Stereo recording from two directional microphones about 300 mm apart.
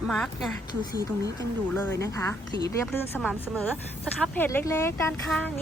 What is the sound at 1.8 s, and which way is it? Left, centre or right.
A woman's voice, centre.